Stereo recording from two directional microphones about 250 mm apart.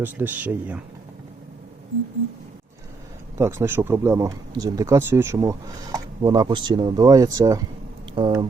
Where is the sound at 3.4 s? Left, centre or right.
Centre.